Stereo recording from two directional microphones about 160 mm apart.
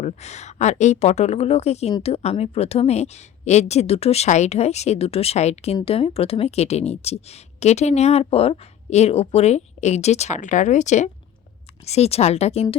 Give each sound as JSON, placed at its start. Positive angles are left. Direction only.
{"t": 0.0, "sound": "a woman's voice", "side_deg": 45}